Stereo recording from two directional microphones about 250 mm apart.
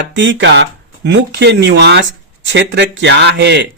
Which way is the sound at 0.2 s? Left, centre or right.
Right.